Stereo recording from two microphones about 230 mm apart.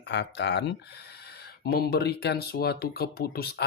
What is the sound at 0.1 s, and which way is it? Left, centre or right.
Speech, left.